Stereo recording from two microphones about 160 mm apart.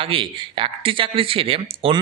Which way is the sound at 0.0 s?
35° right (ahead or behind).